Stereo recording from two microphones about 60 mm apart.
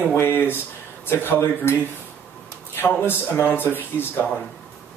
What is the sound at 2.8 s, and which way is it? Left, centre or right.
Speech, left.